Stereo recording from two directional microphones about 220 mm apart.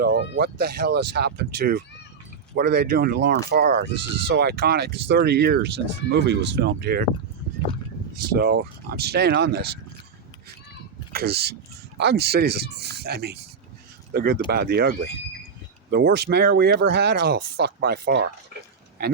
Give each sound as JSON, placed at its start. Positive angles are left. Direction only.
{"t": 0.0, "sound": "speech", "side_deg": -45}
{"t": 8.4, "sound": "speech", "side_deg": -45}
{"t": 11.1, "sound": "speech", "side_deg": -45}